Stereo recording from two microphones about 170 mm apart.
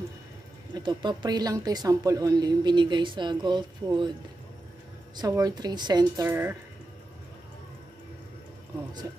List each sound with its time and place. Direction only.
0.7 s a woman's voice: 25° right (ahead or behind)
5.1 s a woman's voice: 20° right (ahead or behind)
6.2 s speech: 15° right (ahead or behind)